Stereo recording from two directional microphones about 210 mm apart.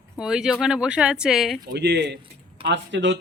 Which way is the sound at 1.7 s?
55° right (ahead or behind).